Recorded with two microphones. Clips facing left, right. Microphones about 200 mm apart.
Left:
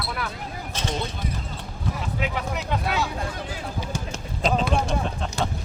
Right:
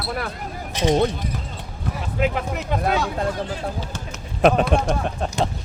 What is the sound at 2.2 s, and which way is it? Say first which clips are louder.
Speech: right 7 dB; 50° right (ahead or behind).